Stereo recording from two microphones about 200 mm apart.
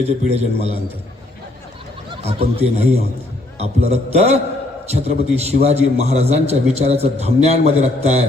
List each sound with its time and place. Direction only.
0.3 s a man's voice: 30° right (ahead or behind)
2.0 s a man's voice: 30° right (ahead or behind)